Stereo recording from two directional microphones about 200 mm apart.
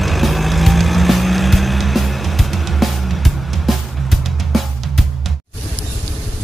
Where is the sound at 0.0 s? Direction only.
Centre (ahead or behind).